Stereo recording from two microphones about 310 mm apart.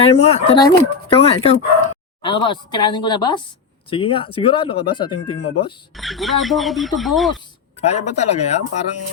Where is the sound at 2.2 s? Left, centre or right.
Centre.